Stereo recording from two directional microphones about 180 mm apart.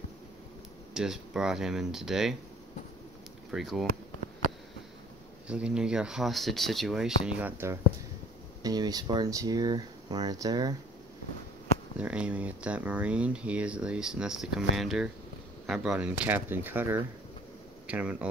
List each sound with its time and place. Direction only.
0.9 s speech: 5° right (ahead or behind)
3.5 s speech: centre (ahead or behind)
5.5 s speech: 5° right (ahead or behind); by 10.8 s 20° right (ahead or behind)
12.0 s speech: 5° right (ahead or behind)